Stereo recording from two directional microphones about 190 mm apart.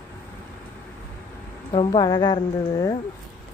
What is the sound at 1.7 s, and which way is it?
Speech, 25° left (ahead or behind).